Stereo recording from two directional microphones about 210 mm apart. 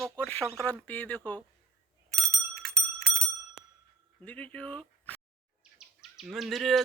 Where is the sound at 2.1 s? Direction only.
Centre (ahead or behind).